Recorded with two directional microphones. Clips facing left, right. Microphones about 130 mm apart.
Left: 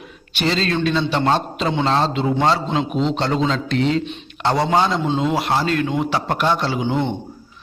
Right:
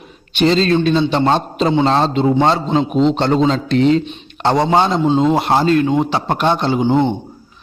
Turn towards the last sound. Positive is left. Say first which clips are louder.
# right 7 dB
turn(degrees=-40)  # may be behind; listen again after turning